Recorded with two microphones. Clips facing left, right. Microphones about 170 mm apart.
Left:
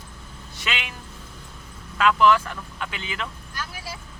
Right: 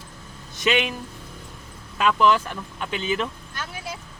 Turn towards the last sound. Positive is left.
turn(degrees=-25)  # may be behind; listen again after turning